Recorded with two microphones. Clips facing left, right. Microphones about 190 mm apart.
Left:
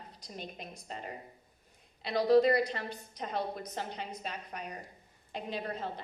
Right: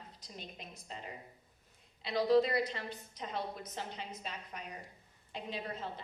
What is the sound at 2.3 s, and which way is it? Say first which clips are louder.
A woman's voice: left 6 dB; 60° left (ahead or behind).